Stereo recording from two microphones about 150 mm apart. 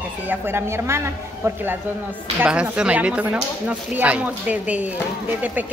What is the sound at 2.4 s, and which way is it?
Speech, 5° right (ahead or behind).